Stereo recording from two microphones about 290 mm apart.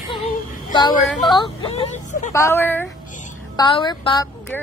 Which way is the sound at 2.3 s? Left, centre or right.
Centre.